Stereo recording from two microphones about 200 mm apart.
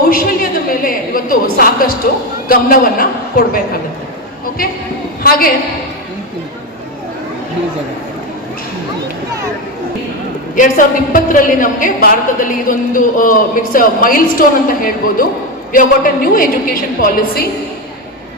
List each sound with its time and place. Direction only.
0.1 s a sound: 45° left (ahead or behind)
2.5 s a woman's voice: 45° left (ahead or behind)
10.5 s a woman's voice: 40° left (ahead or behind)